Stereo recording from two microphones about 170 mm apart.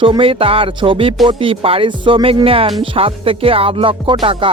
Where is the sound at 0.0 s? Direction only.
30° right (ahead or behind).